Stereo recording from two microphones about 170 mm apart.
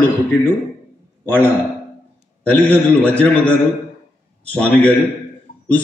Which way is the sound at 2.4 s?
10° left (ahead or behind).